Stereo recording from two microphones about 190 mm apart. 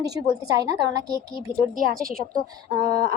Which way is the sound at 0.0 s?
20° right (ahead or behind).